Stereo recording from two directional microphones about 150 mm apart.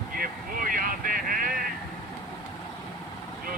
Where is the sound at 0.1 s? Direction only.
70° right (ahead or behind).